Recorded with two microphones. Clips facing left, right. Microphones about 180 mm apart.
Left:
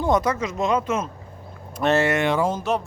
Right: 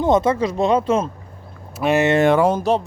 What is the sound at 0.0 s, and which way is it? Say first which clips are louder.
Speech: right 5 dB; 25° right (ahead or behind).